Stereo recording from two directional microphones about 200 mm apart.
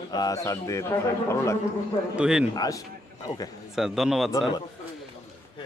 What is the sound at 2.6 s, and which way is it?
Speech, 15° left (ahead or behind).